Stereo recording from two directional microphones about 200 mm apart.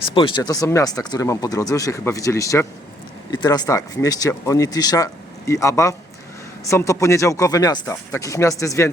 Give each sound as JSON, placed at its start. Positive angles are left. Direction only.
{"t": 0.1, "sound": "speech", "side_deg": 25}